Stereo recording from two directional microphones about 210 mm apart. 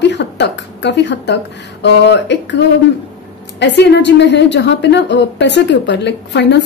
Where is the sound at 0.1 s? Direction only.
55° left (ahead or behind).